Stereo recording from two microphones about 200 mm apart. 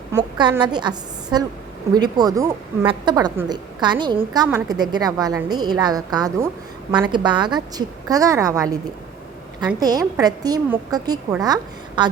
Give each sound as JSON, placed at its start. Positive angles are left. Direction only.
{"t": 0.1, "sound": "a woman's voice", "side_deg": -20}
{"t": 9.8, "sound": "a woman's voice", "side_deg": -20}